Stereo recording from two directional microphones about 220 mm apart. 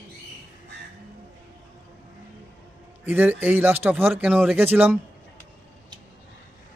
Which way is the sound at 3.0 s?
10° right (ahead or behind).